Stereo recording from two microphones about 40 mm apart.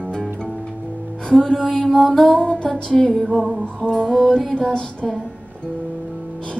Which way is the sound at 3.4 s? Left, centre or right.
Centre.